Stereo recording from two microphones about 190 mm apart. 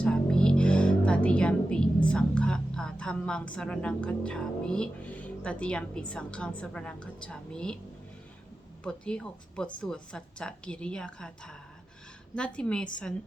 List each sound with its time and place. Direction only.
0.0 s speech: 5° left (ahead or behind)
8.8 s a woman's voice: 5° left (ahead or behind)
12.5 s a woman's voice: 5° left (ahead or behind)